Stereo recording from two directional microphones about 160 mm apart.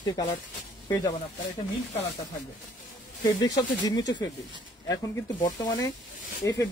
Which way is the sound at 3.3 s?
20° left (ahead or behind).